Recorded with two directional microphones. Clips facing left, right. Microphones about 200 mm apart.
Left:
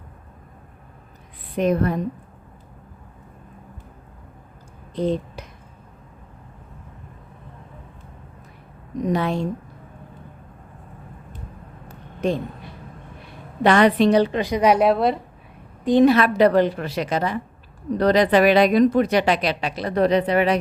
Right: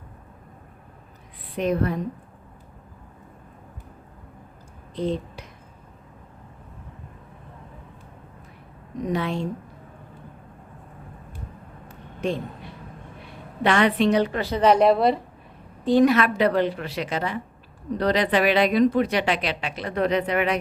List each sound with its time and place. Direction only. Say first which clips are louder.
1.5 s a woman's voice: left 3 dB; 45° left (ahead or behind)
4.9 s speech: left 3 dB; 45° left (ahead or behind)
9.1 s speech: left 3 dB; 40° left (ahead or behind)
12.2 s speech: left 4 dB; 40° left (ahead or behind)
13.6 s speech: left 4 dB; 40° left (ahead or behind)
14.3 s a woman's voice: left 1 dB; 15° left (ahead or behind)
15.8 s a woman's voice: left 2 dB; 20° left (ahead or behind)
16.0 s speech: left 4 dB; 35° left (ahead or behind)